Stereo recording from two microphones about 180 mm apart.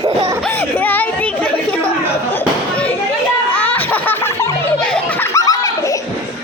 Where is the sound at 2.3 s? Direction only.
10° left (ahead or behind).